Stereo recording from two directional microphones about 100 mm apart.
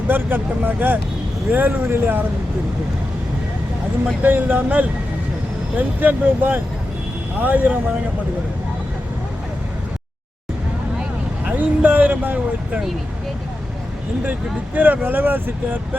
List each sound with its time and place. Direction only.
0.1 s speech: 20° right (ahead or behind)
4.2 s speech: 20° right (ahead or behind)
11.4 s speech: 15° right (ahead or behind)
14.8 s speech: 20° right (ahead or behind)